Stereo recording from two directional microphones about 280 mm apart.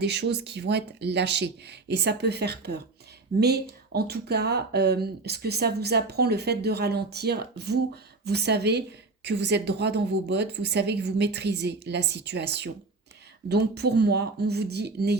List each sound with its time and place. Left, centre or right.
0.0 s speech: right